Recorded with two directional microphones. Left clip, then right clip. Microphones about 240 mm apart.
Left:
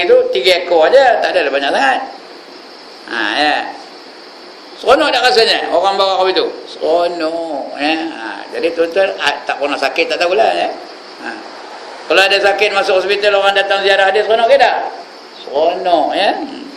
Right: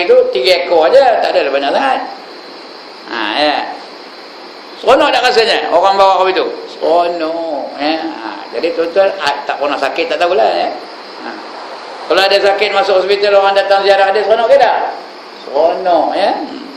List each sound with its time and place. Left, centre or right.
0.0 s speech: left
3.1 s speech: centre
4.8 s a man's voice: centre
12.0 s speech: centre
15.9 s speech: left